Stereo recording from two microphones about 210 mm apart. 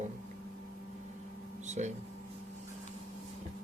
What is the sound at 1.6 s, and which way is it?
Speech, 35° right (ahead or behind).